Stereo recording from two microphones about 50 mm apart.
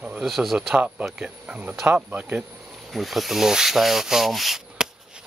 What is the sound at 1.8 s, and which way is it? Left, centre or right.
Speech, right.